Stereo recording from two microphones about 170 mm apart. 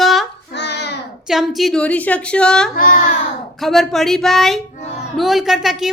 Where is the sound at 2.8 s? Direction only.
55° left (ahead or behind).